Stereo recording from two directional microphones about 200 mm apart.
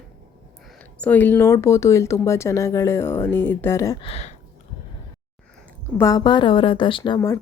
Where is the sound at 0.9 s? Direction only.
5° left (ahead or behind).